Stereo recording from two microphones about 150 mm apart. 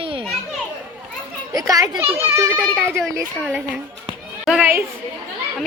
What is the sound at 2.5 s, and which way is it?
Speech, 5° left (ahead or behind).